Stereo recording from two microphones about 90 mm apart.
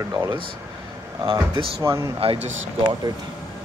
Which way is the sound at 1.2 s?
90° right.